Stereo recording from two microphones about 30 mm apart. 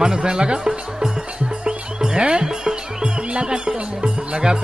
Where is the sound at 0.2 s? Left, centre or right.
Right.